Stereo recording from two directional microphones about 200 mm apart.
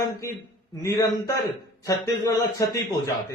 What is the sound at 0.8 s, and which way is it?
Speech, 15° left (ahead or behind).